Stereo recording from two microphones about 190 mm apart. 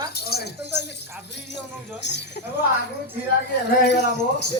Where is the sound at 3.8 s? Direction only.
65° left (ahead or behind).